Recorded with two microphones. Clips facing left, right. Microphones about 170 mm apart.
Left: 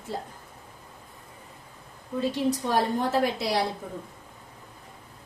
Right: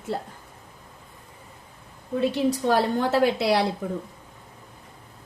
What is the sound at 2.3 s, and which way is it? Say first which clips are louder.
A woman's voice: right 3 dB; 70° right (ahead or behind).